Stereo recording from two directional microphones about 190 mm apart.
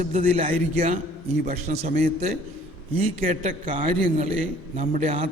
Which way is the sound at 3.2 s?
35° right (ahead or behind).